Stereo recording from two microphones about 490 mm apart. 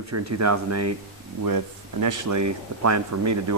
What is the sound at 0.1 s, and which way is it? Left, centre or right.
Speech, right.